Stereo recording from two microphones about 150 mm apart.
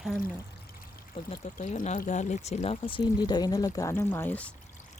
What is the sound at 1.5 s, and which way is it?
Speech, 55° left (ahead or behind).